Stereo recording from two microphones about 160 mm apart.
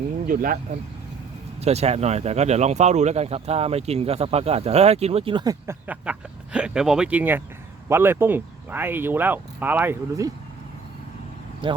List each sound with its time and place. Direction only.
0.3 s speech: 55° right (ahead or behind)
1.6 s speech: 40° right (ahead or behind); by 5.7 s 25° right (ahead or behind)
5.9 s speech: 5° right (ahead or behind)
11.6 s speech: 30° right (ahead or behind)